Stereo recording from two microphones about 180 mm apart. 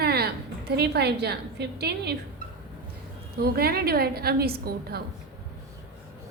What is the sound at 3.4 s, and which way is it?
A woman's voice, 60° right (ahead or behind).